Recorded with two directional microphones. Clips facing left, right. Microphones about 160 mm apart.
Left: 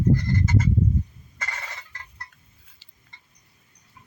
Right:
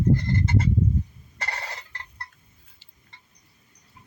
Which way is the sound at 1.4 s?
35° right (ahead or behind).